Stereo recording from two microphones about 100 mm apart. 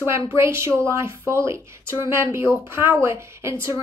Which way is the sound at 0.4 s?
25° right (ahead or behind).